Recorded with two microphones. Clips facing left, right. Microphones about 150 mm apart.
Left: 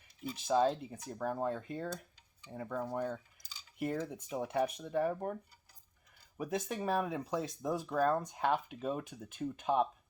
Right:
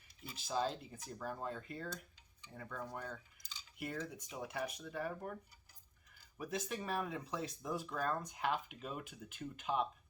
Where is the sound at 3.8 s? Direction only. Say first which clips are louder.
Left 7 dB; 45° left (ahead or behind).